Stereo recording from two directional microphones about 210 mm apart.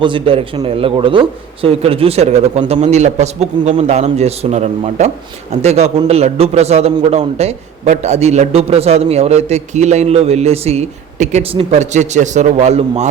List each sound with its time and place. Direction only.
0.0 s a man's voice: 25° right (ahead or behind)